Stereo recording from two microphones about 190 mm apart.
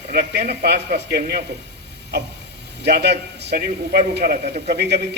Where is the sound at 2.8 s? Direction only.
60° right (ahead or behind).